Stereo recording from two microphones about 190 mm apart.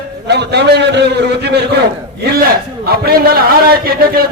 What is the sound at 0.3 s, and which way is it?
A man's voice, 65° right (ahead or behind).